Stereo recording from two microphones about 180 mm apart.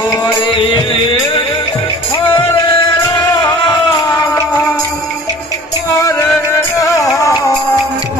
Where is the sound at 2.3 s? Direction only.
25° left (ahead or behind).